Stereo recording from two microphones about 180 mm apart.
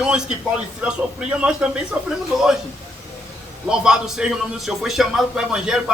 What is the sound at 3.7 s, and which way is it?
A man's voice, 5° right (ahead or behind).